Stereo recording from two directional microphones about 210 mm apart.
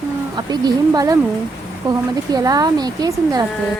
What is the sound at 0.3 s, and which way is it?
Speech, 20° right (ahead or behind).